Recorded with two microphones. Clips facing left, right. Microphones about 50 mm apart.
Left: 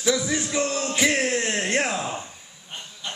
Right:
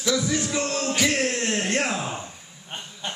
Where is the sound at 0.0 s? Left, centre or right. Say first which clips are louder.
Even; centre.